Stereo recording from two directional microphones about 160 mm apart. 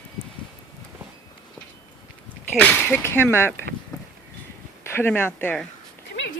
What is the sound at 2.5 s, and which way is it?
Speech, 5° left (ahead or behind).